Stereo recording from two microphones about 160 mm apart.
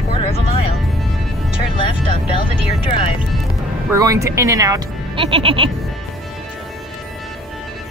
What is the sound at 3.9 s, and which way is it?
Speech, 20° right (ahead or behind).